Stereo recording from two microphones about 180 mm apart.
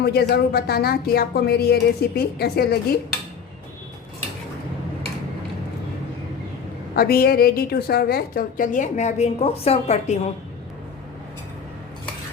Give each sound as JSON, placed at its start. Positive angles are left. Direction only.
{"t": 0.0, "sound": "speech", "side_deg": 65}
{"t": 6.9, "sound": "a woman's voice", "side_deg": 55}